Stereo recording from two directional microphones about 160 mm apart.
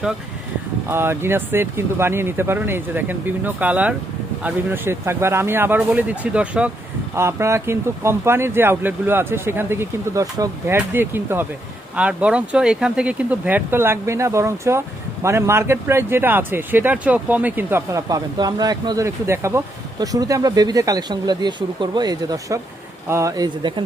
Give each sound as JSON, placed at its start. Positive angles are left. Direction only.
{"t": 0.9, "sound": "speech", "side_deg": -15}